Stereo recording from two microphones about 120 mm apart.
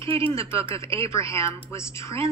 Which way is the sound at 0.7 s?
25° left (ahead or behind).